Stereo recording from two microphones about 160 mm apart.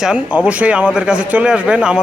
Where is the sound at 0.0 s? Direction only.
5° right (ahead or behind).